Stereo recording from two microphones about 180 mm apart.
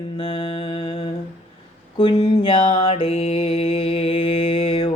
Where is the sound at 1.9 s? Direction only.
25° left (ahead or behind).